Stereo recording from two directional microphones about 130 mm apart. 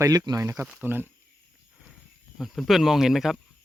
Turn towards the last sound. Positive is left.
turn(degrees=-5)  # may be behind; listen again after turning